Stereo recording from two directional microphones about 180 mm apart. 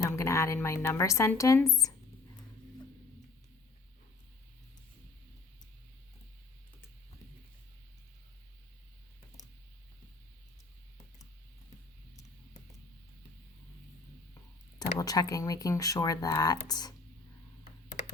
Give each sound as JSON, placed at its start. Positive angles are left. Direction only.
{"t": 0.2, "sound": "speech", "side_deg": 15}
{"t": 14.9, "sound": "speech", "side_deg": 20}